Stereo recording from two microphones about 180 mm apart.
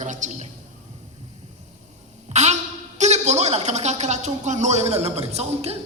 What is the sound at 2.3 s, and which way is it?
A woman's voice, 40° right (ahead or behind).